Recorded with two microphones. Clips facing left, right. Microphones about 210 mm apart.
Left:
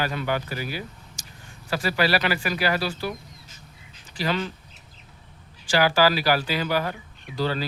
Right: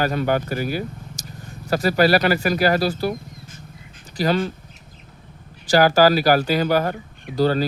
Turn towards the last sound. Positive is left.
turn(degrees=-45)  # may be behind; listen again after turning